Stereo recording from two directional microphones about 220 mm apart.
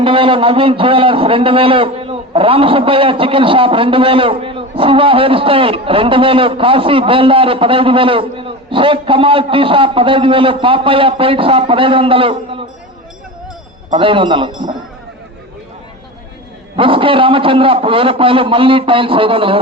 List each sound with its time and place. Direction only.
0.0 s a man's voice: 25° right (ahead or behind)
13.9 s a man's voice: 25° right (ahead or behind)
16.7 s a man's voice: 25° right (ahead or behind)